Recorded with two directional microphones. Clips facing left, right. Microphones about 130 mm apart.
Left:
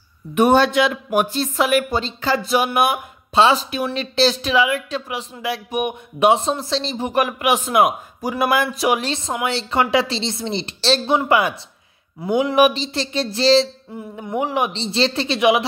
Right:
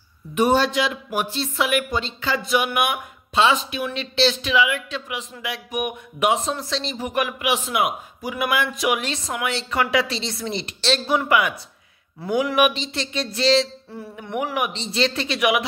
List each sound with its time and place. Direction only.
0.4 s speech: 60° left (ahead or behind); by 13.7 s 35° left (ahead or behind)
13.9 s speech: 20° left (ahead or behind)